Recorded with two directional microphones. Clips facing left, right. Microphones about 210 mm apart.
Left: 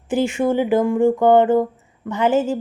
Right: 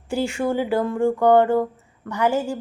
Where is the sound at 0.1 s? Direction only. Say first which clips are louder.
Left 4 dB; 20° left (ahead or behind).